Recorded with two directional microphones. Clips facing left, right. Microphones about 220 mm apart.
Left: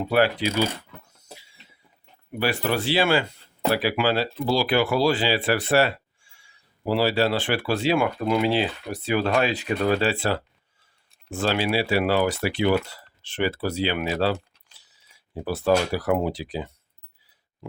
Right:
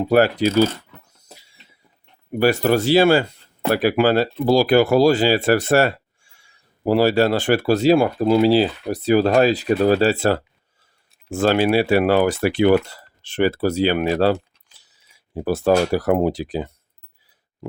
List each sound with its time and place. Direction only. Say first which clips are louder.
0.0 s speech: right 5 dB; 45° right (ahead or behind)
2.3 s speech: right 8 dB; 45° right (ahead or behind)
15.4 s speech: right 5 dB; 45° right (ahead or behind)